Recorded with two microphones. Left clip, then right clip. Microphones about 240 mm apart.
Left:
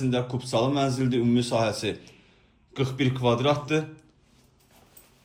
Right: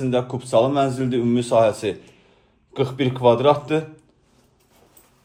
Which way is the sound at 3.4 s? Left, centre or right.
Centre.